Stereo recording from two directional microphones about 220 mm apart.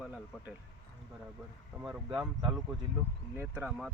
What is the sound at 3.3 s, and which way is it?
Speech, 10° right (ahead or behind).